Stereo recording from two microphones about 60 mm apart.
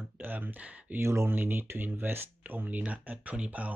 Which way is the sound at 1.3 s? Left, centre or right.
Right.